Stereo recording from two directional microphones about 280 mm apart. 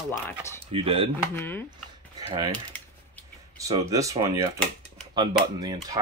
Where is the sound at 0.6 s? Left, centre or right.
Centre.